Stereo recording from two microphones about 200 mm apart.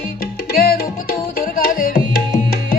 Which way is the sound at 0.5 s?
50° left (ahead or behind).